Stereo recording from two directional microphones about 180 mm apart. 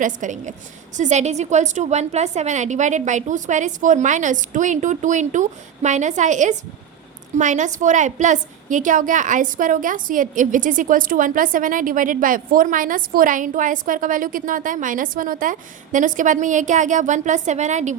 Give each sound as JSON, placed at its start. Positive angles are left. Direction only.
{"t": 0.0, "sound": "a woman's voice", "side_deg": -45}